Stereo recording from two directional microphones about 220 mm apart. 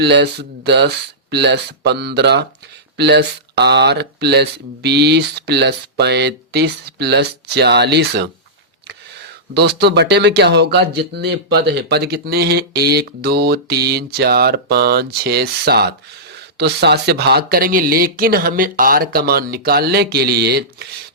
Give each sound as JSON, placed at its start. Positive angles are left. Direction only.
{"t": 0.0, "sound": "speech", "side_deg": -50}
{"t": 9.6, "sound": "speech", "side_deg": -50}